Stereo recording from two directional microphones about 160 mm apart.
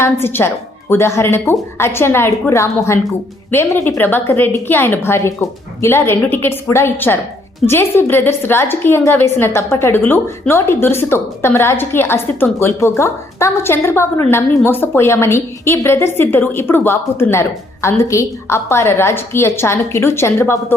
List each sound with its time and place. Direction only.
0.0 s a woman's voice: 15° left (ahead or behind)